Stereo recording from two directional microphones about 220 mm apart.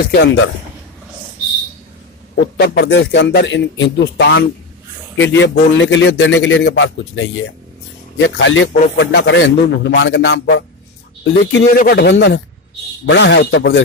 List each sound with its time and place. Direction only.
0.0 s speech: 50° left (ahead or behind)
2.5 s a man's voice: 50° left (ahead or behind)
11.8 s speech: 45° left (ahead or behind)